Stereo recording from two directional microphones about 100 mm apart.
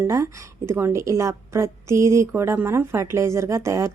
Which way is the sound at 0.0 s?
25° right (ahead or behind).